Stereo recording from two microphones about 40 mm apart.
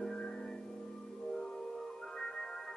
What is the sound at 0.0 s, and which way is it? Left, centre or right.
Music, centre.